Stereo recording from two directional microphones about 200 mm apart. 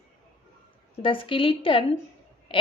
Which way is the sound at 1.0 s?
25° left (ahead or behind).